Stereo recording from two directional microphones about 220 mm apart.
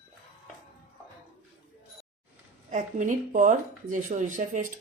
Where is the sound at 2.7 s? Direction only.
35° right (ahead or behind).